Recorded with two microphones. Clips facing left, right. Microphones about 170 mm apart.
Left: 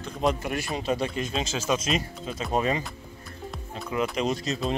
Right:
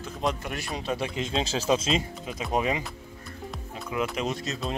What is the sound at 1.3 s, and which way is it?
Speech, 30° right (ahead or behind).